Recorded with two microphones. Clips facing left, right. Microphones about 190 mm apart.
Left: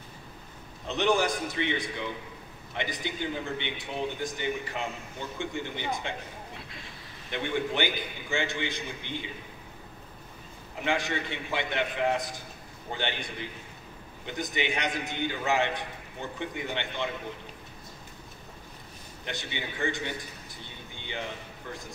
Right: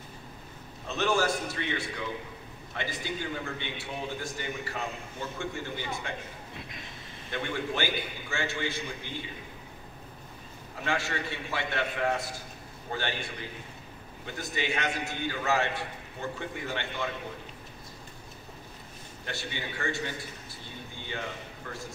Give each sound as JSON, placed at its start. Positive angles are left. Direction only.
{"t": 0.8, "sound": "a man's voice", "side_deg": 15}
{"t": 7.2, "sound": "a man's voice", "side_deg": 20}
{"t": 10.8, "sound": "a man's voice", "side_deg": 15}
{"t": 19.2, "sound": "a man's voice", "side_deg": 20}